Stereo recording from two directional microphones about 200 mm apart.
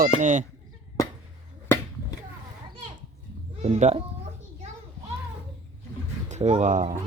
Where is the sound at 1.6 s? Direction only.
10° left (ahead or behind).